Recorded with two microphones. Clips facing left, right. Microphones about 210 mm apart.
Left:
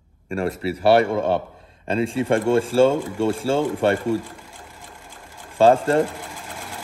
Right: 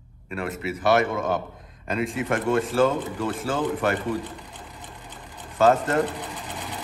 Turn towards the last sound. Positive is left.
turn(degrees=0)  # may be behind; listen again after turning